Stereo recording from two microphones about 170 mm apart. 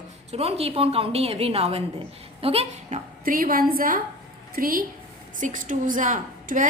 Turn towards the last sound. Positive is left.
turn(degrees=-50)  # may be behind; listen again after turning